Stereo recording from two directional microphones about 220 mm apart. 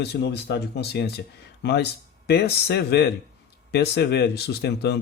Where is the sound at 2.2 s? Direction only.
45° left (ahead or behind).